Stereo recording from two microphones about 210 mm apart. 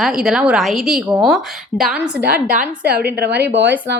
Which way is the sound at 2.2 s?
45° right (ahead or behind).